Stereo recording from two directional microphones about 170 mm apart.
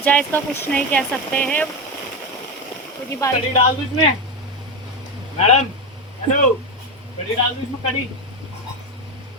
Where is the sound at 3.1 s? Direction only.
20° left (ahead or behind).